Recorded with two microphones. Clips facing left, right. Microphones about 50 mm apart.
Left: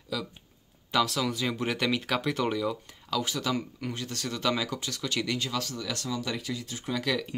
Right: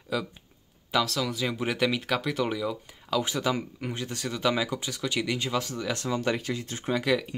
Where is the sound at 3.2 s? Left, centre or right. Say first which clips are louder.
Right 2 dB; right.